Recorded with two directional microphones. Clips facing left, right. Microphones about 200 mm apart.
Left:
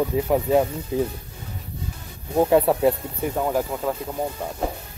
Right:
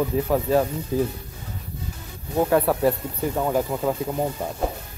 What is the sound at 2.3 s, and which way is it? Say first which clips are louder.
Speech: left 2 dB; 25° left (ahead or behind).